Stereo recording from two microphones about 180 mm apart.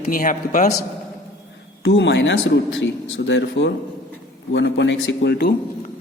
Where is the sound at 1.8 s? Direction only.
75° left (ahead or behind).